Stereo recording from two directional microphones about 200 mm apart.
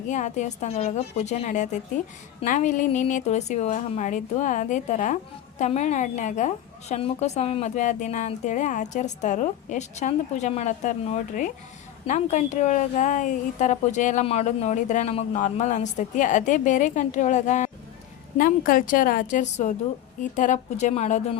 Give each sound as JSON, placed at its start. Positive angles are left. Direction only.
{"t": 0.1, "sound": "a woman's voice", "side_deg": 35}